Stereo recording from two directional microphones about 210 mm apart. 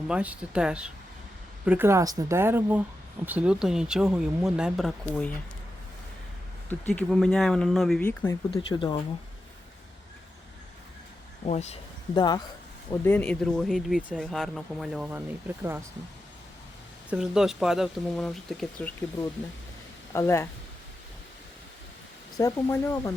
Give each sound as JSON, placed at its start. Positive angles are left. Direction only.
{"t": 0.1, "sound": "a woman's voice", "side_deg": -5}
{"t": 6.7, "sound": "speech", "side_deg": 10}
{"t": 8.4, "sound": "speech", "side_deg": 25}
{"t": 11.4, "sound": "speech", "side_deg": 30}
{"t": 12.1, "sound": "speech", "side_deg": 20}
{"t": 12.9, "sound": "speech", "side_deg": 10}
{"t": 17.1, "sound": "speech", "side_deg": 0}
{"t": 20.1, "sound": "speech", "side_deg": 10}
{"t": 22.4, "sound": "speech", "side_deg": 15}